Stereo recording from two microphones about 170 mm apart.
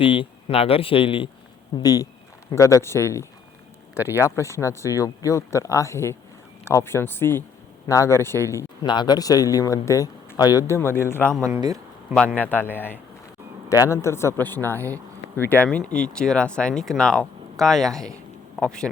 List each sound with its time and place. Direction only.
0.0 s speech: 30° left (ahead or behind); by 18.9 s 5° left (ahead or behind)